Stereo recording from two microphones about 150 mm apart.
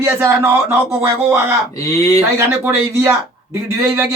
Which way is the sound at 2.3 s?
15° right (ahead or behind).